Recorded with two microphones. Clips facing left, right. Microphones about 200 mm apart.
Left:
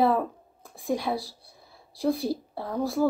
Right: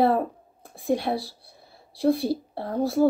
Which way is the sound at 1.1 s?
45° right (ahead or behind).